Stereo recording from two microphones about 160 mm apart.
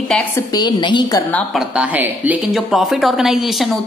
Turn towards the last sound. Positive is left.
turn(degrees=0)  # may be behind; listen again after turning